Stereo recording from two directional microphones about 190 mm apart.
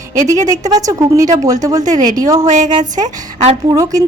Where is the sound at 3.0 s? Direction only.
35° right (ahead or behind).